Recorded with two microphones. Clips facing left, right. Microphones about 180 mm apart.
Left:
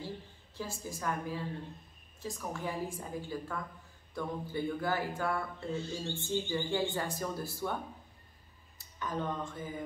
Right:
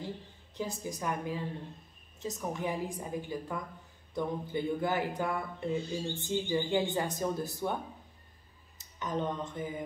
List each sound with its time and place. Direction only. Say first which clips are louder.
0.6 s a woman's voice: right 4 dB; 20° right (ahead or behind)
8.7 s speech: right 3 dB; 20° right (ahead or behind)